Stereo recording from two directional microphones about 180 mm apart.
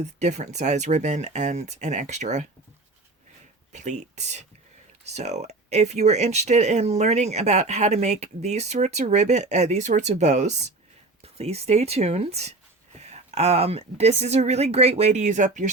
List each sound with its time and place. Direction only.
0.2 s speech: 40° right (ahead or behind)
3.7 s speech: 40° right (ahead or behind)